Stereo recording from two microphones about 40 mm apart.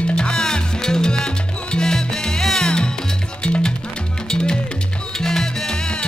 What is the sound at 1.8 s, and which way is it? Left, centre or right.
Music, centre.